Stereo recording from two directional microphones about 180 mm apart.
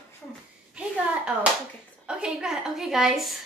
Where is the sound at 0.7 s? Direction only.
5° right (ahead or behind).